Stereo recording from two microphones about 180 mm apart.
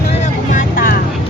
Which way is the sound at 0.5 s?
50° left (ahead or behind).